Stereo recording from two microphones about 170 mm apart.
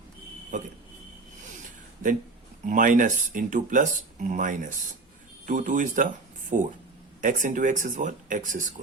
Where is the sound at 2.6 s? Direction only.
50° right (ahead or behind).